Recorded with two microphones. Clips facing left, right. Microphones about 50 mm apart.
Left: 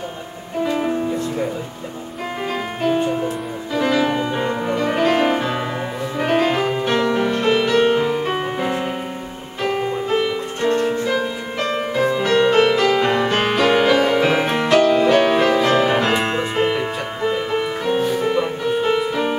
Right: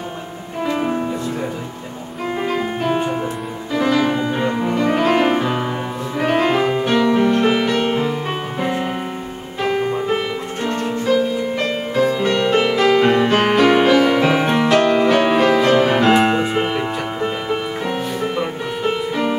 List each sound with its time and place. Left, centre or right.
0.7 s music: centre
2.4 s music: centre
2.9 s music: centre
3.7 s music: centre
10.8 s music: centre
12.4 s music: centre